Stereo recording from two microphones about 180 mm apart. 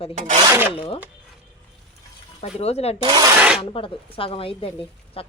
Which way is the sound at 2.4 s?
35° left (ahead or behind).